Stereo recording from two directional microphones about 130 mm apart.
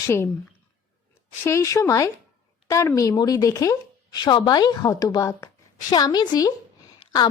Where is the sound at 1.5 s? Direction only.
25° left (ahead or behind).